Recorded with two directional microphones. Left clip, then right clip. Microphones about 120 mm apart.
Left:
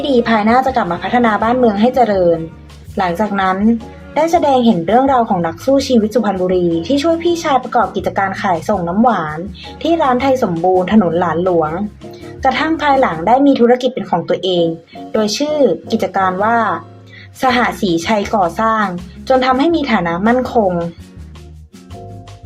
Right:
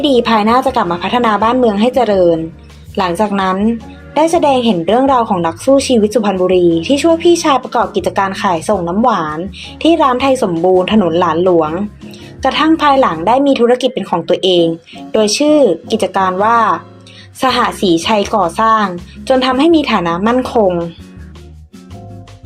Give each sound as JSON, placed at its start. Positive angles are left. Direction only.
{"t": 0.1, "sound": "a woman's voice", "side_deg": -35}